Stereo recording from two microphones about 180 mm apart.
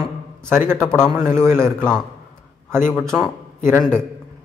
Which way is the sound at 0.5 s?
15° right (ahead or behind).